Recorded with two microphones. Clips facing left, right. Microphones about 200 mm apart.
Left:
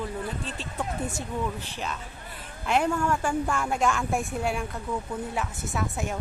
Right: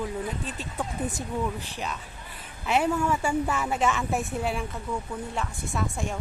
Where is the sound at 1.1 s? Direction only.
35° right (ahead or behind).